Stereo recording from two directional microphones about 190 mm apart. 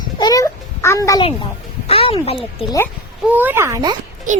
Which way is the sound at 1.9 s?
30° left (ahead or behind).